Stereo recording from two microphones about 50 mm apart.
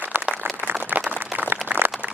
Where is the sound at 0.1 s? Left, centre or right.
Right.